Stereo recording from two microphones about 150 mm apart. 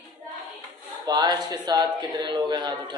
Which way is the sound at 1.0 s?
30° right (ahead or behind).